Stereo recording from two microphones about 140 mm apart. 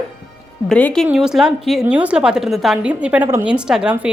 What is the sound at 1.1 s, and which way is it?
Speech, 5° right (ahead or behind).